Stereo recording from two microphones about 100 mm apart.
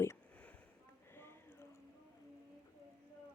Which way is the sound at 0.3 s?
15° left (ahead or behind).